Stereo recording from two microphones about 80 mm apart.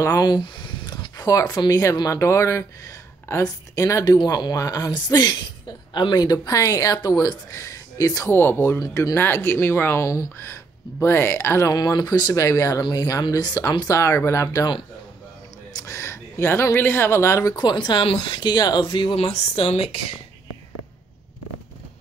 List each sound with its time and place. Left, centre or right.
0.0 s a sound: left
1.1 s speech: left
4.2 s speech: left
8.3 s speech: left
8.7 s speech: left
9.1 s speech: left
11.7 s speech: left
12.4 s speech: left
13.3 s speech: left
13.8 s speech: left
15.7 s speech: left
17.6 s speech: left